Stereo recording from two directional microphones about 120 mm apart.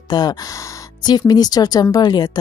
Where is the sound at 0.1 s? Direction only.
35° left (ahead or behind).